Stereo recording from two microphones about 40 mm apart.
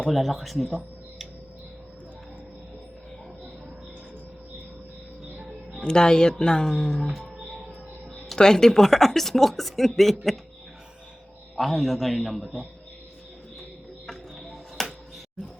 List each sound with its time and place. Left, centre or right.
0.1 s a man's voice: centre
5.8 s speech: centre
8.4 s speech: centre
11.5 s a man's voice: centre
14.8 s music: centre